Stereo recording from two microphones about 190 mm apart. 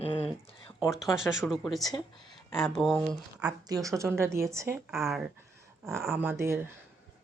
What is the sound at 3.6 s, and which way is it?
Speech, 15° right (ahead or behind).